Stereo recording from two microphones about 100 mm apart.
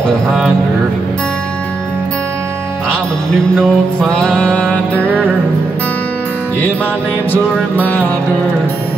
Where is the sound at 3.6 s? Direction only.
5° left (ahead or behind).